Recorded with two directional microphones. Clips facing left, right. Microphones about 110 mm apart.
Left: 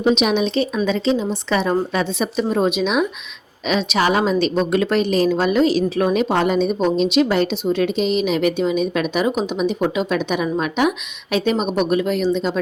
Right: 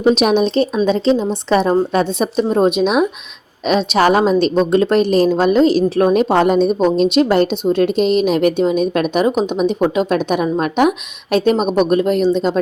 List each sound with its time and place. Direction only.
0.2 s a woman's voice: 40° right (ahead or behind)